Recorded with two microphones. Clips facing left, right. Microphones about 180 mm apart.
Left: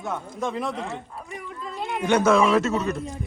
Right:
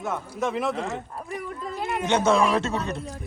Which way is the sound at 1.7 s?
Centre (ahead or behind).